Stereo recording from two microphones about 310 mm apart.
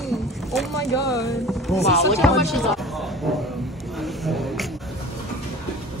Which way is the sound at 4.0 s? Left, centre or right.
Centre.